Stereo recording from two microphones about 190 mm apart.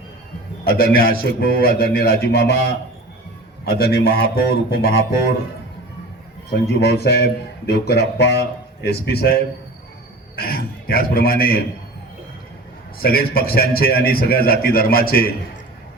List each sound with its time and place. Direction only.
0.6 s a man's voice: 50° left (ahead or behind)
3.8 s a man's voice: 55° left (ahead or behind)
6.5 s a man's voice: 60° left (ahead or behind)
13.0 s a man's voice: 50° left (ahead or behind)